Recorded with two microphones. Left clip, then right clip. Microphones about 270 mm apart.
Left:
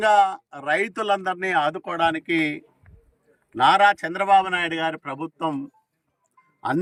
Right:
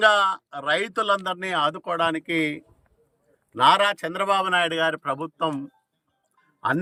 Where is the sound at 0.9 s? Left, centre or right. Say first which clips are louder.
Even; centre.